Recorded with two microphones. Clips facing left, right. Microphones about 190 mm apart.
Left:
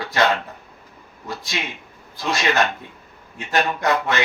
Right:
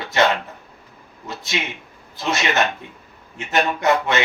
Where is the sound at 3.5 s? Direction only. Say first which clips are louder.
Right 2 dB; 25° right (ahead or behind).